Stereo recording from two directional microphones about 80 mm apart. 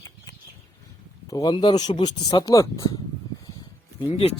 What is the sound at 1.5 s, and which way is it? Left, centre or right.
Speech, left.